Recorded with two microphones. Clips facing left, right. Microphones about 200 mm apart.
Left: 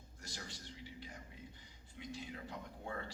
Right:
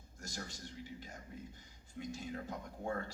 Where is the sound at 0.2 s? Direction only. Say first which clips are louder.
Right 5 dB; 45° right (ahead or behind).